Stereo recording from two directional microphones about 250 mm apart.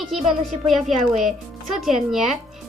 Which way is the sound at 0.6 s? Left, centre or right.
Centre.